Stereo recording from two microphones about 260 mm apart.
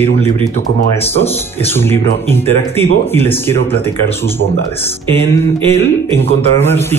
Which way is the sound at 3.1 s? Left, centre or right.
Centre.